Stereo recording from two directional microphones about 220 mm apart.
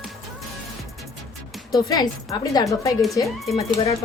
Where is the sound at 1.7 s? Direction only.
15° left (ahead or behind).